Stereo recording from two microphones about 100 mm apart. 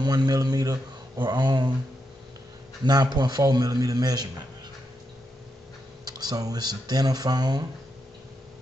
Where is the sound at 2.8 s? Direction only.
45° right (ahead or behind).